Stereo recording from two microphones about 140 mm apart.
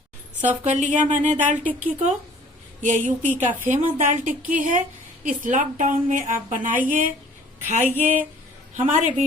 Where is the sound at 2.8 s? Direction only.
65° right (ahead or behind).